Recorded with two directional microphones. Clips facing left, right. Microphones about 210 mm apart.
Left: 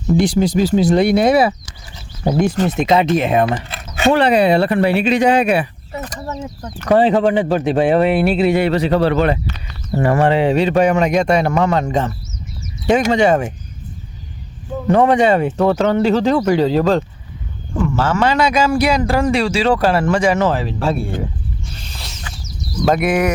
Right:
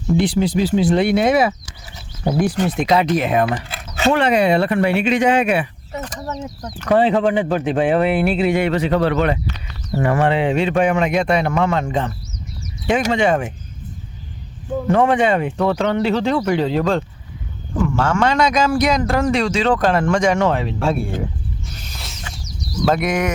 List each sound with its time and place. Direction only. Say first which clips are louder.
0.1 s speech: left 2 dB; 40° left (ahead or behind)
2.6 s speech: left 2 dB; 25° left (ahead or behind)
6.1 s speech: left 1 dB; 5° left (ahead or behind)
6.8 s speech: left 2 dB; 40° left (ahead or behind)
14.8 s speech: left 3 dB; 35° left (ahead or behind)
17.7 s a man's voice: left 1 dB; centre (ahead or behind)
21.9 s a sound: left 1 dB; centre (ahead or behind)
23.0 s speech: left 4 dB; 30° left (ahead or behind)